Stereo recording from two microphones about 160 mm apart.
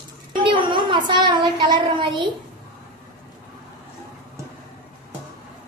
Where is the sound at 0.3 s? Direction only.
30° right (ahead or behind).